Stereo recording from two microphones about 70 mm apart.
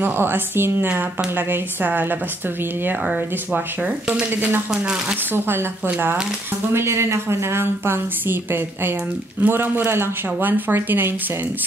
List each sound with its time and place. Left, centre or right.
0.0 s speech: right
3.5 s speech: right
9.4 s speech: right